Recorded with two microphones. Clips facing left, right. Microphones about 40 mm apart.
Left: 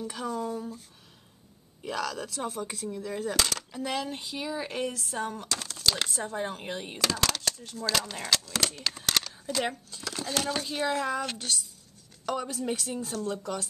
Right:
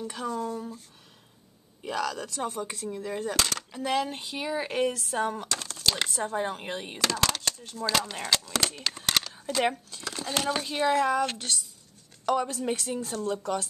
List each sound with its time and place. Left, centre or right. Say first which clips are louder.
0.0 s speech: right 1 dB; centre
2.9 s speech: right 1 dB; centre
3.2 s speech: even; centre
5.6 s a sound: even; centre
5.9 s speech: right 1 dB; centre
9.6 s speech: right 5 dB; right
9.9 s speech: right 1 dB; centre